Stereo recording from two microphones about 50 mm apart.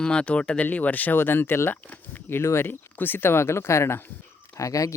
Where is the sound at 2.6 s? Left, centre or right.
Left.